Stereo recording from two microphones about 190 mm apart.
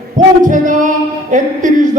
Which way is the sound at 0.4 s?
45° right (ahead or behind).